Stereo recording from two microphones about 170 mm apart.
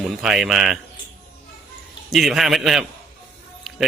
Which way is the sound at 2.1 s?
Centre (ahead or behind).